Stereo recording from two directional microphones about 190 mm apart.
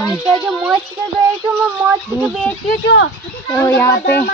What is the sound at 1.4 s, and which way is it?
Speech, 10° right (ahead or behind).